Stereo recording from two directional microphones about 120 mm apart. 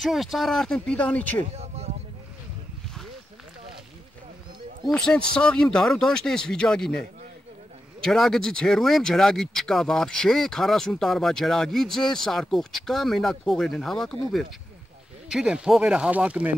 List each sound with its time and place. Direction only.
0.0 s speech: centre (ahead or behind)
1.4 s a sound: 60° right (ahead or behind)
4.8 s speech: 5° left (ahead or behind); by 16.5 s 10° right (ahead or behind)